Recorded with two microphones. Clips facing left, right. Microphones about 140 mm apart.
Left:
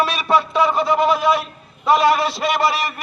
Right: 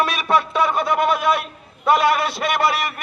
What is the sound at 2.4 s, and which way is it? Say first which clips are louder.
Speech: left 1 dB; 50° right (ahead or behind).